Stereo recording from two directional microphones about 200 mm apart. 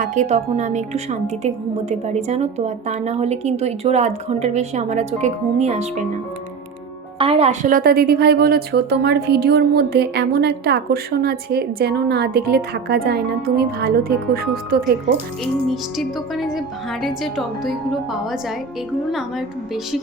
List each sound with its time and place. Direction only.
0.0 s a woman's voice: 35° right (ahead or behind)
7.2 s a woman's voice: 30° right (ahead or behind); by 14.8 s 50° right (ahead or behind)
15.6 s speech: centre (ahead or behind)